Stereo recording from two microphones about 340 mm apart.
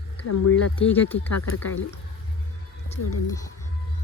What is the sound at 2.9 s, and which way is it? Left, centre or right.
Speech, centre.